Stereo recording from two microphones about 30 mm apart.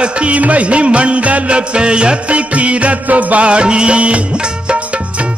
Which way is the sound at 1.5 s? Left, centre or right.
Right.